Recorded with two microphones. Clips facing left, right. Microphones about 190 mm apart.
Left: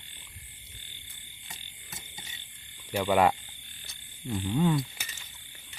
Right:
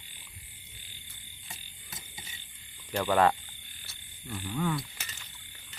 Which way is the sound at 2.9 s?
10° left (ahead or behind).